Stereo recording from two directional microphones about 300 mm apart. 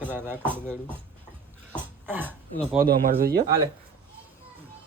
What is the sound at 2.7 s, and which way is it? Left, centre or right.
Speech, right.